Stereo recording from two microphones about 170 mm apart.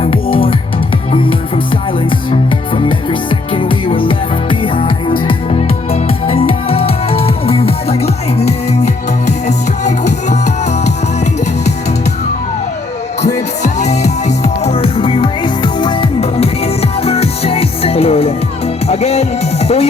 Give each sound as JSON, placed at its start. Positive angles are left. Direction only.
{"t": 0.0, "sound": "music", "side_deg": 30}
{"t": 2.7, "sound": "music", "side_deg": 30}
{"t": 13.2, "sound": "music", "side_deg": 45}